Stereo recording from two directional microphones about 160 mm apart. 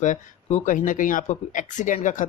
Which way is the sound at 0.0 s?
45° left (ahead or behind).